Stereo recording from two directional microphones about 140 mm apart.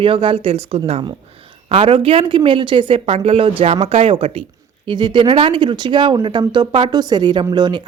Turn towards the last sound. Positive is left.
turn(degrees=-30)  # may be behind; listen again after turning